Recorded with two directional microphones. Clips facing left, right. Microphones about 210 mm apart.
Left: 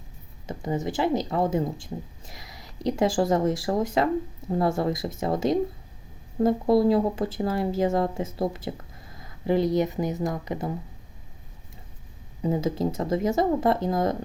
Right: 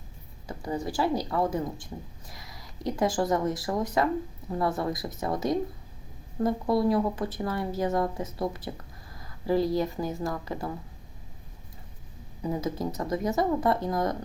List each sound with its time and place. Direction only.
0.4 s speech: 20° left (ahead or behind)
12.4 s speech: 25° left (ahead or behind)